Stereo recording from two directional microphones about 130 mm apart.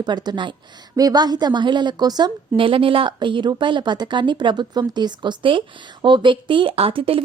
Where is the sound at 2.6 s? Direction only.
40° right (ahead or behind).